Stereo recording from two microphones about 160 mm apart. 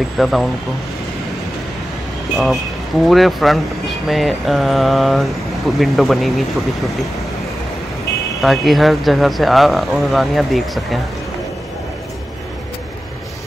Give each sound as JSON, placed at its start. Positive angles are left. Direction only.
{"t": 0.2, "sound": "speech", "side_deg": 0}
{"t": 2.3, "sound": "speech", "side_deg": 0}
{"t": 8.4, "sound": "speech", "side_deg": 0}